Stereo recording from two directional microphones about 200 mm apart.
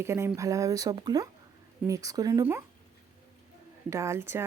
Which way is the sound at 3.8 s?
15° right (ahead or behind).